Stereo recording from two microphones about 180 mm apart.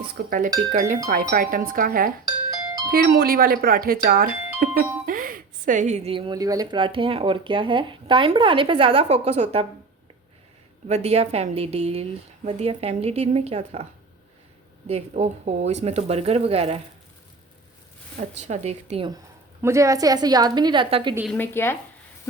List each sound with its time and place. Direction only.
0.3 s speech: 50° right (ahead or behind)
2.2 s music: 20° right (ahead or behind)
2.9 s speech: 55° right (ahead or behind); by 9.6 s 35° right (ahead or behind)
10.8 s speech: 35° right (ahead or behind)
14.8 s speech: 35° right (ahead or behind)
18.2 s speech: 40° right (ahead or behind)
19.6 s a woman's voice: 15° right (ahead or behind)
21.2 s speech: 10° left (ahead or behind)